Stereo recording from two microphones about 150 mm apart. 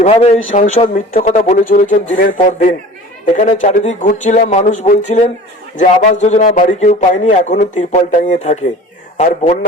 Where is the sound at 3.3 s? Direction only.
55° left (ahead or behind).